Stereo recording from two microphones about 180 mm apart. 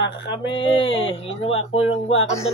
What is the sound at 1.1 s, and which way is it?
Speech, 30° left (ahead or behind).